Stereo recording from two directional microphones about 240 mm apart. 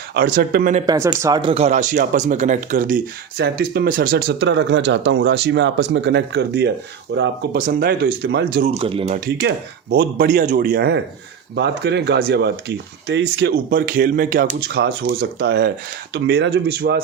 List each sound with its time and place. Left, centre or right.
0.1 s speech: right
0.9 s speech: centre; by 17.0 s right